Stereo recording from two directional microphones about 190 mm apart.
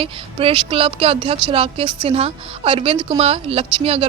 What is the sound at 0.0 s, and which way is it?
A woman's voice, 30° right (ahead or behind).